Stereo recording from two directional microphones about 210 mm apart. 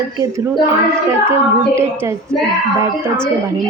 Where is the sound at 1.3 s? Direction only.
10° right (ahead or behind).